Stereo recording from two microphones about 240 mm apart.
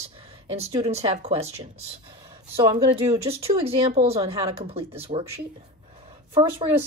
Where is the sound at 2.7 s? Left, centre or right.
Centre.